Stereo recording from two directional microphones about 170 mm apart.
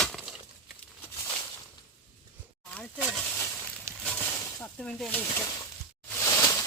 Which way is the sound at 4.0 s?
5° left (ahead or behind).